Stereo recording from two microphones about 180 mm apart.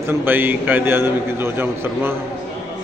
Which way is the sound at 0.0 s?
10° right (ahead or behind).